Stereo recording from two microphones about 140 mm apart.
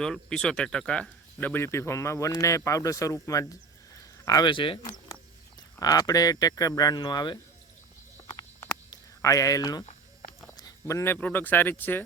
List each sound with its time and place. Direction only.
0.0 s speech: 5° left (ahead or behind); by 4.8 s 35° left (ahead or behind)
5.8 s speech: 25° left (ahead or behind)
8.9 s a sound: 25° left (ahead or behind)
10.6 s speech: 25° left (ahead or behind)